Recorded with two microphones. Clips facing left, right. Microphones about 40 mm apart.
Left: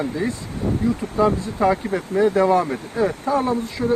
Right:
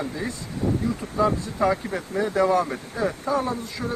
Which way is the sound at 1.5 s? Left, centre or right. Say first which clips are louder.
Left 3 dB; centre.